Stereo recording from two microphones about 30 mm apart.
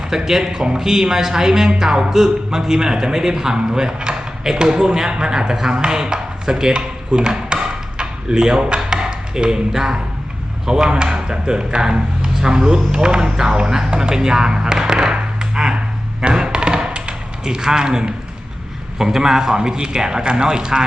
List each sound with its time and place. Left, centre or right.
0.1 s a man's voice: centre
5.7 s chop: right
10.7 s a man's voice: right
16.2 s a sound: right
17.4 s a man's voice: right